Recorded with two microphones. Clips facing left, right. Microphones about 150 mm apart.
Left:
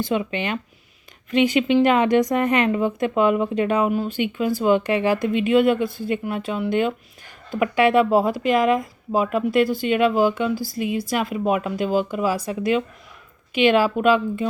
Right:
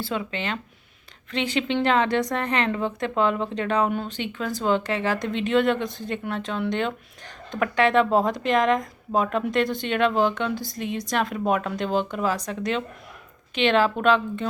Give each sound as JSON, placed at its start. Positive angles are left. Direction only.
{"t": 0.0, "sound": "a woman's voice", "side_deg": 15}